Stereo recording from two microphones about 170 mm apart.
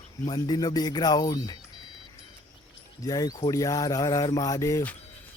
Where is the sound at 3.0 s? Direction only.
20° left (ahead or behind).